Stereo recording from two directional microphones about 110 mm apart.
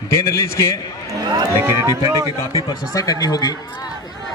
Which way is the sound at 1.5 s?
20° right (ahead or behind).